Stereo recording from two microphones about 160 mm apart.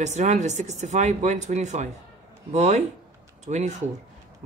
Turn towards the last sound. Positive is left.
turn(degrees=-45)  # may be behind; listen again after turning